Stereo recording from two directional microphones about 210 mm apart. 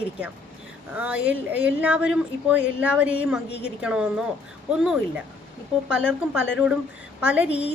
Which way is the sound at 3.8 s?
5° right (ahead or behind).